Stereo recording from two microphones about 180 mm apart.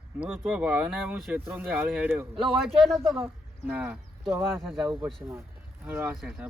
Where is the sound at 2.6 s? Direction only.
Centre (ahead or behind).